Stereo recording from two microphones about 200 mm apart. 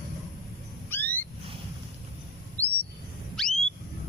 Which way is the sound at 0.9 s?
10° left (ahead or behind).